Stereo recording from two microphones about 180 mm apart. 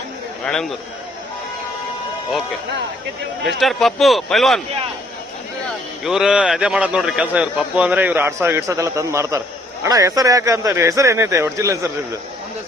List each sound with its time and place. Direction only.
0.4 s a man's voice: 5° left (ahead or behind)
3.4 s a man's voice: centre (ahead or behind)
6.1 s a man's voice: 5° right (ahead or behind)